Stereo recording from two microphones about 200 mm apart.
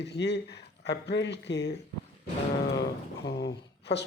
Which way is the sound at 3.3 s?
60° left (ahead or behind).